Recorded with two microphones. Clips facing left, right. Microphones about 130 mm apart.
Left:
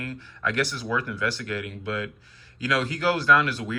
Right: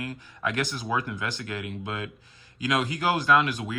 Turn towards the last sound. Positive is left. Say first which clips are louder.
# left 1 dB
turn(degrees=-15)  # may be behind; listen again after turning